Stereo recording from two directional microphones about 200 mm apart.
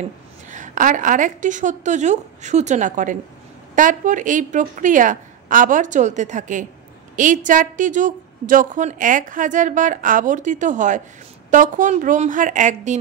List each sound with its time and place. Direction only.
0.5 s a woman's voice: 40° right (ahead or behind)